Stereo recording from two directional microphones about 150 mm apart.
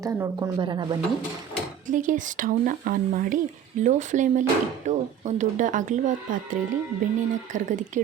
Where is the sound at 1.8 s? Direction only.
60° right (ahead or behind).